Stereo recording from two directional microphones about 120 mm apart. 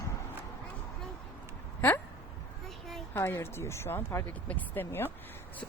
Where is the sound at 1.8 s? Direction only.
20° left (ahead or behind).